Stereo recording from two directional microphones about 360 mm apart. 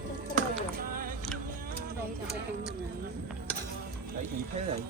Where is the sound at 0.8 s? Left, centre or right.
Right.